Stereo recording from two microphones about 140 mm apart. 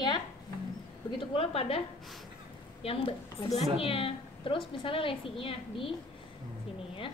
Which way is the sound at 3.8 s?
40° left (ahead or behind).